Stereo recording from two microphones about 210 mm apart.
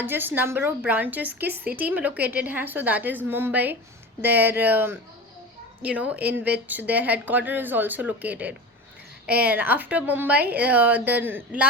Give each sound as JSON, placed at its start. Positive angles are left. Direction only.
{"t": 0.0, "sound": "a woman's voice", "side_deg": -10}